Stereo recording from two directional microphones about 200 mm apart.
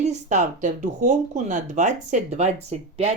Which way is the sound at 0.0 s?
35° right (ahead or behind).